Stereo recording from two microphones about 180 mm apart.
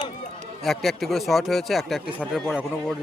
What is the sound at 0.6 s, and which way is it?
Speech, centre (ahead or behind).